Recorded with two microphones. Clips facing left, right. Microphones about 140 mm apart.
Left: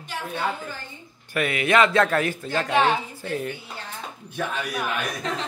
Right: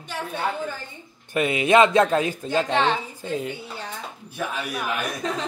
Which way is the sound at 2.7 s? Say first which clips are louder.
Left 3 dB; 10° left (ahead or behind).